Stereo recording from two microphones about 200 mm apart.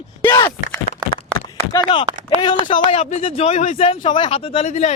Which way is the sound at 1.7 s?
25° left (ahead or behind).